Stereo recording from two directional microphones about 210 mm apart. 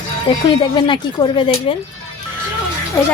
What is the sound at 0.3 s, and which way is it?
Speech, 25° left (ahead or behind).